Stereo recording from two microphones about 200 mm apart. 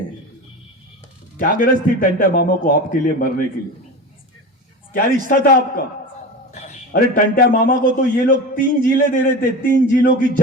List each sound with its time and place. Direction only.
1.4 s a man's voice: 45° left (ahead or behind)
4.9 s a man's voice: 45° left (ahead or behind)
6.5 s a man's voice: 35° left (ahead or behind)